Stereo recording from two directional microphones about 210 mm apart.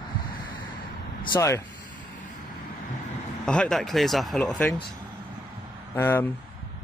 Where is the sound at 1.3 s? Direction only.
15° left (ahead or behind).